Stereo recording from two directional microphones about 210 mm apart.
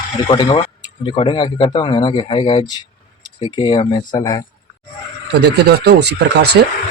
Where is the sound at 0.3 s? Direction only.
25° left (ahead or behind).